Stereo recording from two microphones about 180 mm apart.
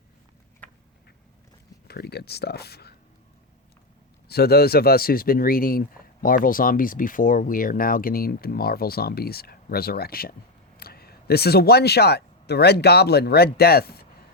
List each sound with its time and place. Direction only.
1.9 s speech: 65° left (ahead or behind)
4.3 s speech: 60° left (ahead or behind)